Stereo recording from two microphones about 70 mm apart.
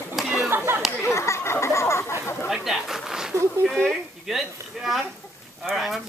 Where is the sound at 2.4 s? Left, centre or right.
Centre.